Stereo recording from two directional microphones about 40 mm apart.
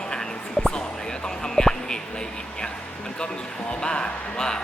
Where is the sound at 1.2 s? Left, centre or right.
Centre.